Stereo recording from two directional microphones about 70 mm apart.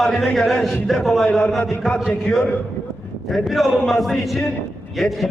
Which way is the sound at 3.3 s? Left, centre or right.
Centre.